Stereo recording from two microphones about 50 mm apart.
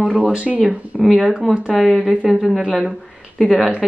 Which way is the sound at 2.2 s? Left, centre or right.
Centre.